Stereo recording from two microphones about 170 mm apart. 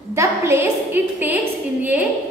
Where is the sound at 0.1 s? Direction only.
15° right (ahead or behind).